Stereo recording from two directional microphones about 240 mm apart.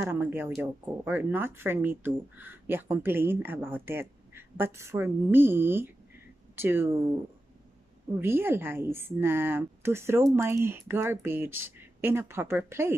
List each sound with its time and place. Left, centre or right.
0.0 s speech: centre
8.2 s speech: centre